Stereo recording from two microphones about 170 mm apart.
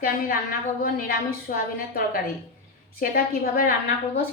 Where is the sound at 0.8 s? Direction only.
60° left (ahead or behind).